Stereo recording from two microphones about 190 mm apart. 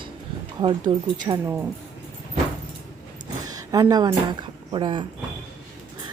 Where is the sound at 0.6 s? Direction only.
25° right (ahead or behind).